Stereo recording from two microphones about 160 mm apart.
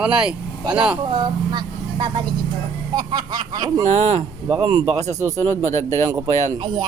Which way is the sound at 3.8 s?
45° right (ahead or behind).